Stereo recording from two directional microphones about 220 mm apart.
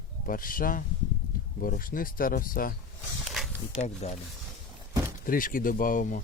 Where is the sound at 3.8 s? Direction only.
30° left (ahead or behind).